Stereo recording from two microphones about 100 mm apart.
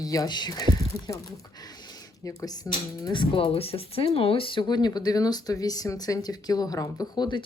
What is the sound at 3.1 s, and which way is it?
Speech, 60° left (ahead or behind).